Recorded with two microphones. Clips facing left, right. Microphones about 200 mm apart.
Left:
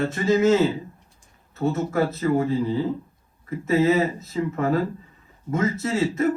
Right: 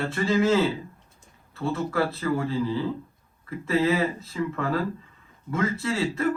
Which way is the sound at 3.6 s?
40° left (ahead or behind).